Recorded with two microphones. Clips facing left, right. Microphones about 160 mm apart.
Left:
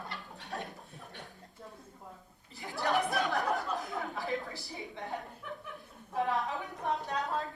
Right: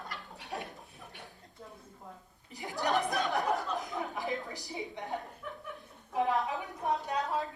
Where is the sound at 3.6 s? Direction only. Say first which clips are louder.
Even; 20° right (ahead or behind).